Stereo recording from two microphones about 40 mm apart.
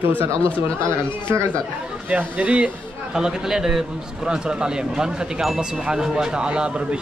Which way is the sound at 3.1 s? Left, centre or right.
Centre.